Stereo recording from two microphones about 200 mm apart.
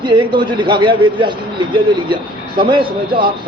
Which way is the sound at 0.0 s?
25° right (ahead or behind).